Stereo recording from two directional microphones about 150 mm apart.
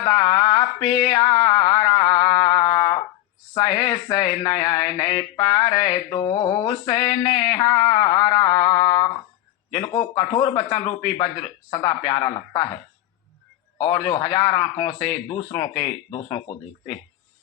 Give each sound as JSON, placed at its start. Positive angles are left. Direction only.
{"t": 0.0, "sound": "a sound", "side_deg": 30}
{"t": 3.5, "sound": "speech", "side_deg": 25}
{"t": 13.7, "sound": "speech", "side_deg": 30}